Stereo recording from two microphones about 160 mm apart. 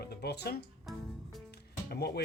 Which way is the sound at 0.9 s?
Centre (ahead or behind).